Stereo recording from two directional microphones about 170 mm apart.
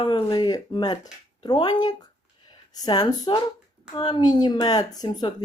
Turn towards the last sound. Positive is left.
turn(degrees=20)  # may be behind; listen again after turning